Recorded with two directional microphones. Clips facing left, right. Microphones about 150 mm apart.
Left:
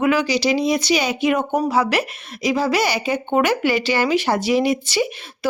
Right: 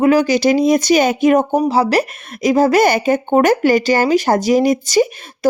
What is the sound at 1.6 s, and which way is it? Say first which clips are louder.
Speech: right 5 dB; 30° right (ahead or behind).